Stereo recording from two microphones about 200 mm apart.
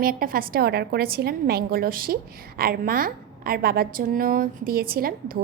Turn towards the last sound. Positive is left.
turn(degrees=-45)  # may be behind; listen again after turning